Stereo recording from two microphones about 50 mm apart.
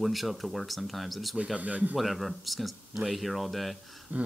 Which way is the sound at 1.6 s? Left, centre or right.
Right.